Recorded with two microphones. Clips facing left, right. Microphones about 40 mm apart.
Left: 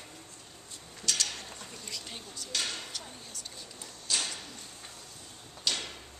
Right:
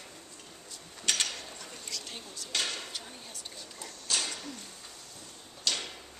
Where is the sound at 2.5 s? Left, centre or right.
Centre.